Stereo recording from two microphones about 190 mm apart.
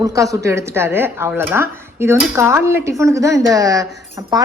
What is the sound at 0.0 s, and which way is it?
A woman's voice, 15° right (ahead or behind).